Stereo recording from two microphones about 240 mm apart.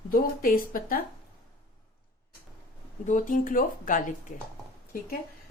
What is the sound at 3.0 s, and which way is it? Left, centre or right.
A woman's voice, left.